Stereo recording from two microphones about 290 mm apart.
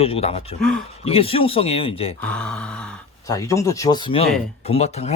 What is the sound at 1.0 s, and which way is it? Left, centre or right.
Speech, centre.